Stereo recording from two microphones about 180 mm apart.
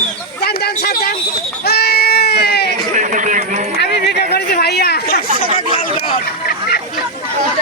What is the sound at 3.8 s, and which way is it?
Chatter, 65° left (ahead or behind).